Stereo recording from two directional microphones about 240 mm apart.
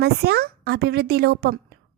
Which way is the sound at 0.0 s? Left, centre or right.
Right.